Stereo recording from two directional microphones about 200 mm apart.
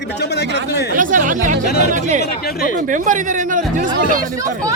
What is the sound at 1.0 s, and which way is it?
A man's voice, 40° right (ahead or behind).